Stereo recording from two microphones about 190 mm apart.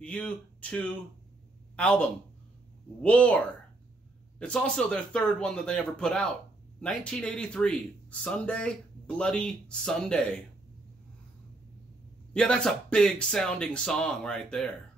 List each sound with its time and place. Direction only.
0.0 s speech: 5° left (ahead or behind)
12.4 s speech: 5° left (ahead or behind)